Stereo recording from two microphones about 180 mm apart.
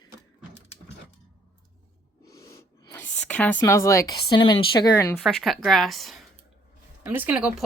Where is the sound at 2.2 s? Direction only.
15° left (ahead or behind).